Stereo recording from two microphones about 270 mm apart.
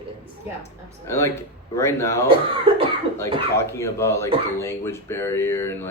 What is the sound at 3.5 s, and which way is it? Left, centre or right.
Speech, centre.